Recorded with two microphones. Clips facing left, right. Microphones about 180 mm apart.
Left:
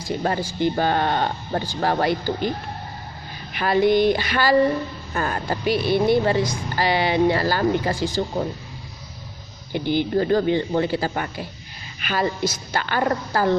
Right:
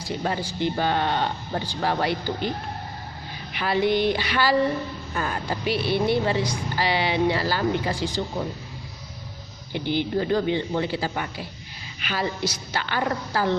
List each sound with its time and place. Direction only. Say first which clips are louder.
0.0 s speech: left 3 dB; 45° left (ahead or behind)
3.5 s speech: left 4 dB; 45° left (ahead or behind)
9.7 s speech: left 4 dB; 45° left (ahead or behind)